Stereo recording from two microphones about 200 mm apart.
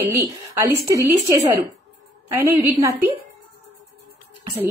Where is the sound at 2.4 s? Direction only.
15° right (ahead or behind).